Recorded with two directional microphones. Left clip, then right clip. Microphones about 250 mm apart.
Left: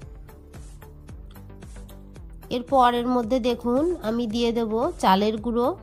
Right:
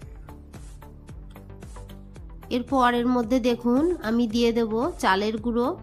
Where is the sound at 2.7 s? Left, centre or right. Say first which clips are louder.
Left 3 dB; left.